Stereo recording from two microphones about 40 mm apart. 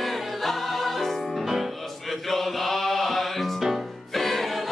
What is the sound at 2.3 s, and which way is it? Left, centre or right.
Mantra, centre.